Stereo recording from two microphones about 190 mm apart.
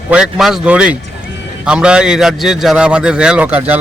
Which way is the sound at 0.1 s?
5° right (ahead or behind).